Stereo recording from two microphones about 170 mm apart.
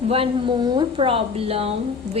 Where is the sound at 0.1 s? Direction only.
30° right (ahead or behind).